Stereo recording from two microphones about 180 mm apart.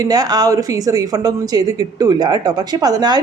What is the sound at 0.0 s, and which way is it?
Speech, 20° right (ahead or behind).